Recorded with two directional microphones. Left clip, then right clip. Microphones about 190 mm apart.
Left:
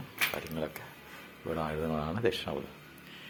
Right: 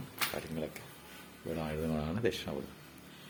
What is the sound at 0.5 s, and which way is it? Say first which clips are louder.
Speech: left 3 dB; centre (ahead or behind).